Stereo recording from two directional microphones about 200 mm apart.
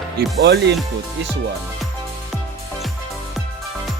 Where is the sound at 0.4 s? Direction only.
60° right (ahead or behind).